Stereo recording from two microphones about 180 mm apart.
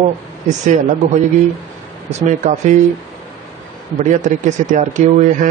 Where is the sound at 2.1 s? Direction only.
40° right (ahead or behind).